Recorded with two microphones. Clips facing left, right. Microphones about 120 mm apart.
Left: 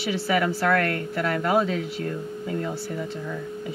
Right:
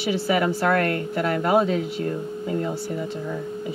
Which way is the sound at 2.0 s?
20° right (ahead or behind).